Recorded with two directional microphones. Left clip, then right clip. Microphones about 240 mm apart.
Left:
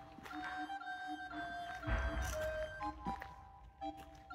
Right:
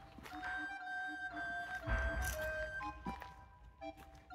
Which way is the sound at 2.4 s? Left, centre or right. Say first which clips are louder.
Even; centre.